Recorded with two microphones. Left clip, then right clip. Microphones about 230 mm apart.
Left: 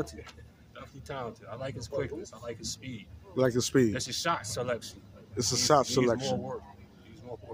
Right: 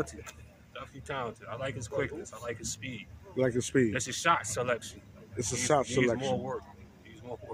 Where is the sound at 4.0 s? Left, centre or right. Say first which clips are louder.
Right 3 dB; centre.